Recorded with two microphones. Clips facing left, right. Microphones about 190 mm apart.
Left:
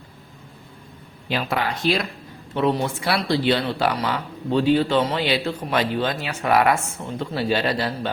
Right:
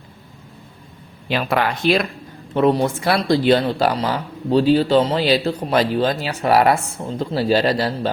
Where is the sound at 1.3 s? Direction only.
70° right (ahead or behind).